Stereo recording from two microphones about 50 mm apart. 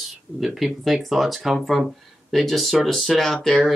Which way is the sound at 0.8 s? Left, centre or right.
Centre.